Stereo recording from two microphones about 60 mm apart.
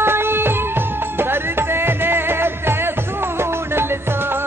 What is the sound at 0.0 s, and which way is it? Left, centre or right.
Music, right.